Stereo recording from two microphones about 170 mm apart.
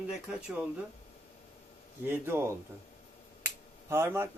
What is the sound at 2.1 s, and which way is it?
Speech, 15° right (ahead or behind).